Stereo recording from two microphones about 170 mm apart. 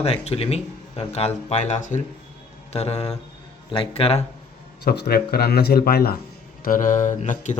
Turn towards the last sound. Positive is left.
turn(degrees=45)  # may be behind; listen again after turning